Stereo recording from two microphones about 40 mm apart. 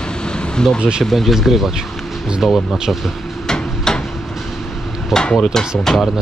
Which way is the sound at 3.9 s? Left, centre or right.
Centre.